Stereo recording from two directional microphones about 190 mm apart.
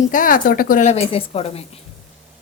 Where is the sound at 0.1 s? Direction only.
45° left (ahead or behind).